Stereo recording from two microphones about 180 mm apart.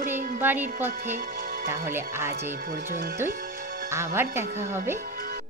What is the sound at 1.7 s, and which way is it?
Speech, 15° right (ahead or behind).